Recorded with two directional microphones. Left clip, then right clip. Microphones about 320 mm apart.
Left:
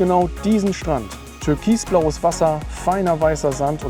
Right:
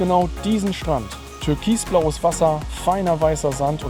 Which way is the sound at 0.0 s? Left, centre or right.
Left.